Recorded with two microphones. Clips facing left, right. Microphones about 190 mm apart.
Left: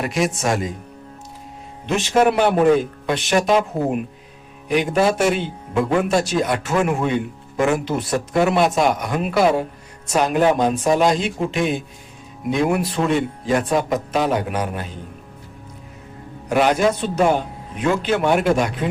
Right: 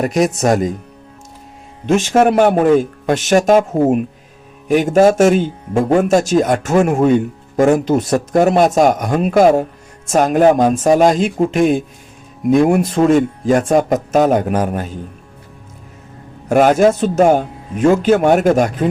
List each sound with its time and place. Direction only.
0.0 s speech: 40° right (ahead or behind)
1.9 s speech: 45° right (ahead or behind)
16.5 s speech: 45° right (ahead or behind)